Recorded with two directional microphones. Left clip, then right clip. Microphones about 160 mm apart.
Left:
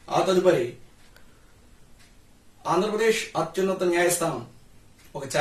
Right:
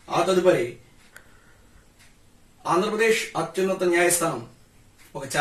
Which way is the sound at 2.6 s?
Centre (ahead or behind).